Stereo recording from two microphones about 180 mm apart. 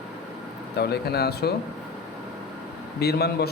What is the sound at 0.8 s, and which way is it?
Speech, 60° left (ahead or behind).